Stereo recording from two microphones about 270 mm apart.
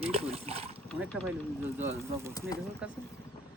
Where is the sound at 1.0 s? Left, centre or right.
Centre.